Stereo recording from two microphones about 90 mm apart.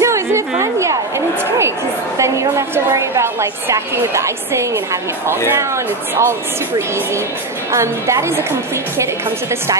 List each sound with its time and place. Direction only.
0.0 s a sound: 35° right (ahead or behind)
2.1 s a woman's voice: 30° right (ahead or behind)
7.7 s a woman's voice: 30° right (ahead or behind)